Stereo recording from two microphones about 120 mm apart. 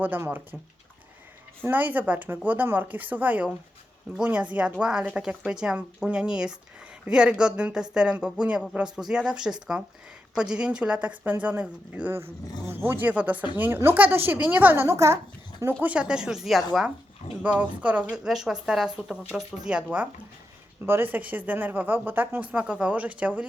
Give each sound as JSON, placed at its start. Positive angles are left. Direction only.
{"t": 0.0, "sound": "speech", "side_deg": -15}
{"t": 1.6, "sound": "speech", "side_deg": -15}
{"t": 15.8, "sound": "speech", "side_deg": -10}
{"t": 17.4, "sound": "speech", "side_deg": -15}